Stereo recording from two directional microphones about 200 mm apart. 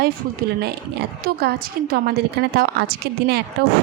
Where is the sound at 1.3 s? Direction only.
50° right (ahead or behind).